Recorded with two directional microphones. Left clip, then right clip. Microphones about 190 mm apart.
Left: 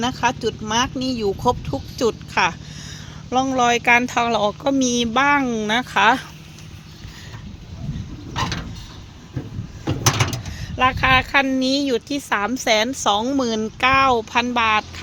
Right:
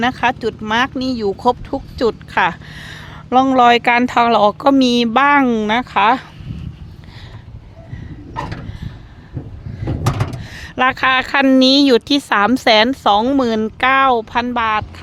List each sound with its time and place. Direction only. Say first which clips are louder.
0.0 s speech: right 4 dB; 10° right (ahead or behind)
10.5 s a woman's voice: right 5 dB; 30° right (ahead or behind); by 15.0 s 5° right (ahead or behind)